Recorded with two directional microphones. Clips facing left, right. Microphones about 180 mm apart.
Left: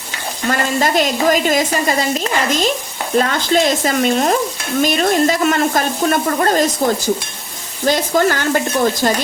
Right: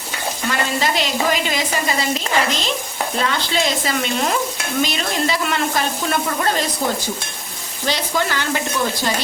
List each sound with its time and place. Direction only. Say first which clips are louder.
0.8 s speech: left 6 dB; 45° left (ahead or behind)
3.2 s speech: left 7 dB; 45° left (ahead or behind)
7.9 s speech: left 7 dB; 45° left (ahead or behind)